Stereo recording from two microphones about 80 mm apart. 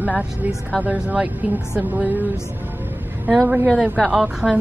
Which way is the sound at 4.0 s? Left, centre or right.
Centre.